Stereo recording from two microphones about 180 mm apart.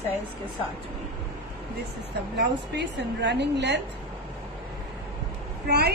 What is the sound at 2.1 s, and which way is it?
A woman's voice, 70° right (ahead or behind).